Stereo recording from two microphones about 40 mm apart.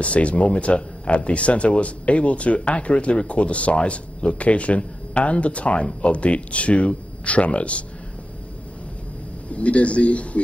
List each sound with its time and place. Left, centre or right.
0.0 s speech: left
9.5 s speech: left